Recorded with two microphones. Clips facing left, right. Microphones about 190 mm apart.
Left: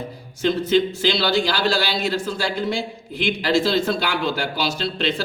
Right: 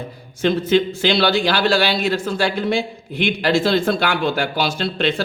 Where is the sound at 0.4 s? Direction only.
55° right (ahead or behind).